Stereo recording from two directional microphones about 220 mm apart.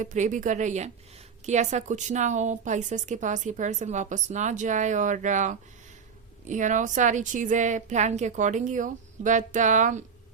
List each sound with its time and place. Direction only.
0.0 s a woman's voice: 35° right (ahead or behind)